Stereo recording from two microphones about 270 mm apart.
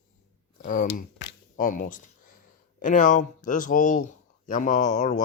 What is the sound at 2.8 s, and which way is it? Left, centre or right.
Speech, left.